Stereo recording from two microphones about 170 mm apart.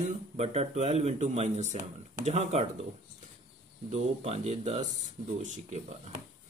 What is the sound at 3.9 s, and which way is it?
Speech, 40° right (ahead or behind).